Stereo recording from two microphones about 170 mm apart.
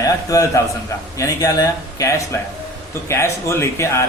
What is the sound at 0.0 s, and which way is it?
Speech, 20° left (ahead or behind).